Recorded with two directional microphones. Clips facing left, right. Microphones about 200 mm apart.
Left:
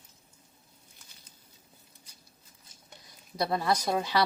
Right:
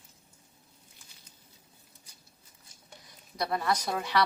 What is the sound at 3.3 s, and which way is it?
Speech, 25° left (ahead or behind).